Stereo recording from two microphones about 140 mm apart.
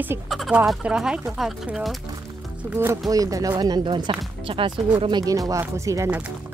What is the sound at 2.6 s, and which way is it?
Speech, 15° right (ahead or behind).